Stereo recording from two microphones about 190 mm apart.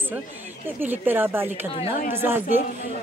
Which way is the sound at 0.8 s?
10° right (ahead or behind).